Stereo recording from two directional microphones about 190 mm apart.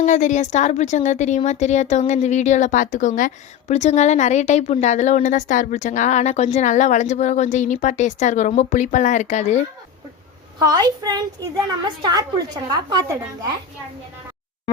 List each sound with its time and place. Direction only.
0.0 s speech: 40° left (ahead or behind)
10.6 s a woman's voice: 20° right (ahead or behind)